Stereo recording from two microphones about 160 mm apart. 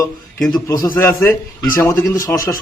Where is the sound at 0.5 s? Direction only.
20° left (ahead or behind).